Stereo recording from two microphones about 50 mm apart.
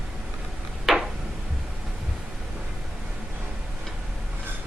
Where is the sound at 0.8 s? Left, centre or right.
Centre.